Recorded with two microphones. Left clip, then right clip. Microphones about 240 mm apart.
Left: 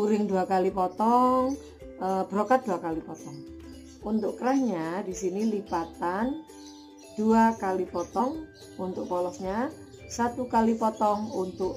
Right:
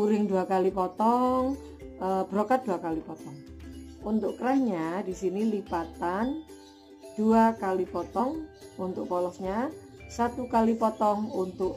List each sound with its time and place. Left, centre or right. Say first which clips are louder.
0.0 s speech: even; centre
7.2 s speech: even; centre